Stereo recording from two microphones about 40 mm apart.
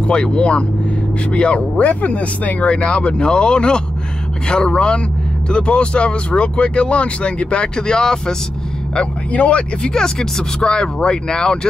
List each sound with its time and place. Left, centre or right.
0.0 s speech: left
2.6 s speech: left
9.3 s speech: left
9.9 s speech: centre